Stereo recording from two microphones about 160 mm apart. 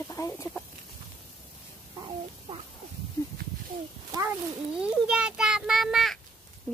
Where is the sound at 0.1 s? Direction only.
20° left (ahead or behind).